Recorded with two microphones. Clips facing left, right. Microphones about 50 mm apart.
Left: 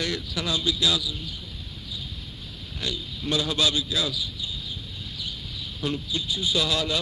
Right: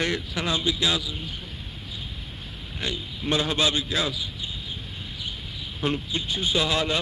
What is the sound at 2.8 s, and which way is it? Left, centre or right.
Speech, right.